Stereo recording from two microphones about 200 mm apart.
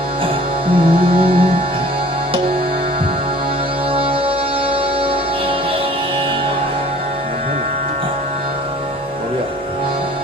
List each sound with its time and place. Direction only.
0.7 s music: 25° right (ahead or behind)